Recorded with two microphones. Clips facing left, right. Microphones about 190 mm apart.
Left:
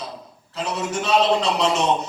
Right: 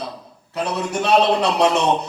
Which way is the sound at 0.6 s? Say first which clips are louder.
Right 3 dB; 60° right (ahead or behind).